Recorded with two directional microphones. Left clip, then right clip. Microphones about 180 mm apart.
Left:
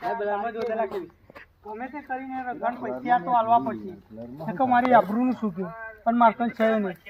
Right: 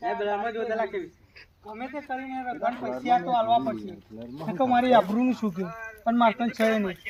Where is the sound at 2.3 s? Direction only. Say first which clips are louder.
Even; 45° right (ahead or behind).